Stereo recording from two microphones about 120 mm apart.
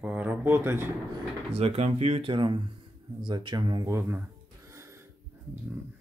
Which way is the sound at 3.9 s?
20° right (ahead or behind).